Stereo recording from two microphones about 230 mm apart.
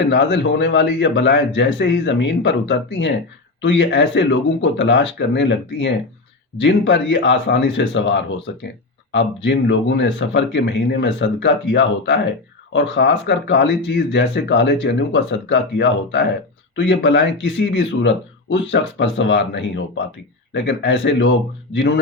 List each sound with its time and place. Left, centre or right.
0.0 s speech: left